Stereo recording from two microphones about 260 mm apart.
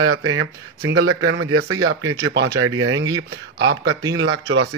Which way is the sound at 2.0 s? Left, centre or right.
Centre.